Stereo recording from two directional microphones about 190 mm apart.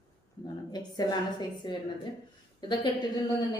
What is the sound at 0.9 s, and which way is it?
A woman's voice, 20° left (ahead or behind).